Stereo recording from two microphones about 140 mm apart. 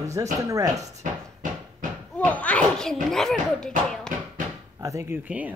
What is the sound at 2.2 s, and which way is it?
A child's voice, 10° left (ahead or behind).